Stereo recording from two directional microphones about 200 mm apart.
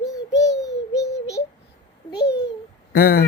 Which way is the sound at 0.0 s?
15° left (ahead or behind).